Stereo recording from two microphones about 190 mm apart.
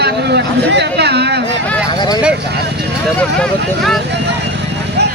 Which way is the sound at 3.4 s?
Centre (ahead or behind).